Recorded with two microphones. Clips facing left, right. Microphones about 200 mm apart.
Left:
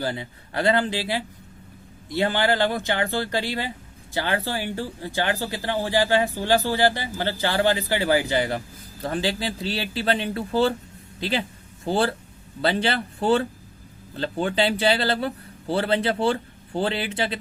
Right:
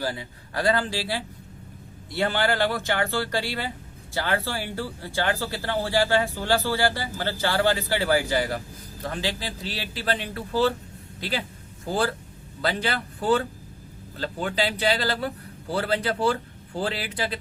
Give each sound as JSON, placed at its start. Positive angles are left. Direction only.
{"t": 0.0, "sound": "speech", "side_deg": 20}